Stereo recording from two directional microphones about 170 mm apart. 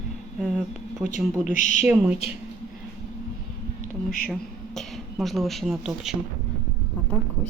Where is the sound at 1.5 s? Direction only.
45° left (ahead or behind).